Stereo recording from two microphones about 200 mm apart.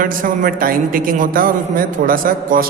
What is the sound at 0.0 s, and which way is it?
A man's voice, 45° right (ahead or behind).